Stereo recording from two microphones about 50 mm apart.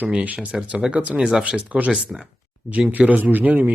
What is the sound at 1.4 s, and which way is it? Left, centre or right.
A man's voice, right.